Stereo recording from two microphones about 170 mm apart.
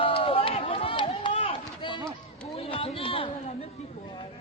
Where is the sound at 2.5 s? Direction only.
35° left (ahead or behind).